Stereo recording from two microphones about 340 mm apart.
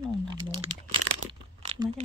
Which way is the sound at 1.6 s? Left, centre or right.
Centre.